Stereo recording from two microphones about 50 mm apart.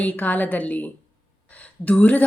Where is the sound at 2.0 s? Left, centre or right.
Left.